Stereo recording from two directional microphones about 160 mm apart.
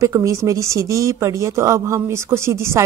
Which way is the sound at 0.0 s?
20° right (ahead or behind).